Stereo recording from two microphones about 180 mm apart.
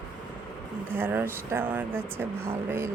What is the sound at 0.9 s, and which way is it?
Speech, 10° right (ahead or behind).